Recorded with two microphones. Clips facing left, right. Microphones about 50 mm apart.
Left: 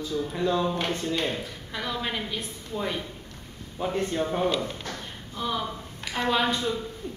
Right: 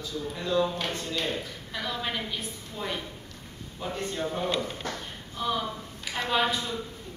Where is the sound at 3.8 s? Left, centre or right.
Left.